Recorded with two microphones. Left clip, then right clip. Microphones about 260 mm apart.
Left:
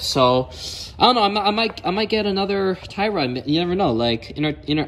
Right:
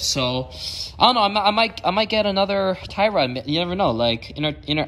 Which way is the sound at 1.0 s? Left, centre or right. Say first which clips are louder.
Left 1 dB; right.